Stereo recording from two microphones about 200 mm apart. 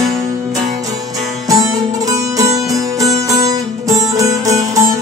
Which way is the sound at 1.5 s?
15° right (ahead or behind).